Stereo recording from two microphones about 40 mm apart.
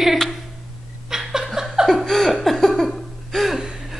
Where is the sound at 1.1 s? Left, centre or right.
Centre.